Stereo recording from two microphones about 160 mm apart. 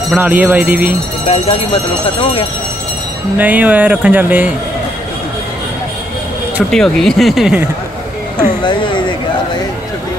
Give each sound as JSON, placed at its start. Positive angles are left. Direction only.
{"t": 0.1, "sound": "speech", "side_deg": -10}
{"t": 1.2, "sound": "speech", "side_deg": 40}
{"t": 3.3, "sound": "speech", "side_deg": -10}
{"t": 6.7, "sound": "speech", "side_deg": 5}
{"t": 8.6, "sound": "a sound", "side_deg": 30}